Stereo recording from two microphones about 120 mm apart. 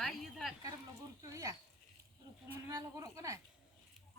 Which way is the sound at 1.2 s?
30° right (ahead or behind).